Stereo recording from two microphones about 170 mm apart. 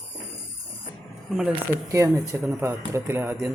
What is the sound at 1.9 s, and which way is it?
Speech, 15° right (ahead or behind).